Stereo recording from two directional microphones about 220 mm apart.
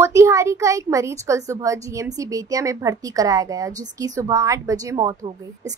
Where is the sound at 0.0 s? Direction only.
15° right (ahead or behind).